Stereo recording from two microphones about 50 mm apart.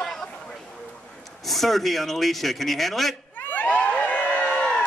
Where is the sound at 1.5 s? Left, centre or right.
Centre.